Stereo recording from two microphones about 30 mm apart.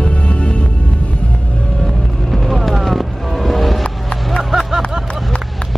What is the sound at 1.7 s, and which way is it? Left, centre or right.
Vehicle, centre.